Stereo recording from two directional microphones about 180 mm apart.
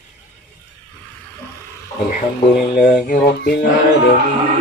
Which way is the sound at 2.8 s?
50° left (ahead or behind).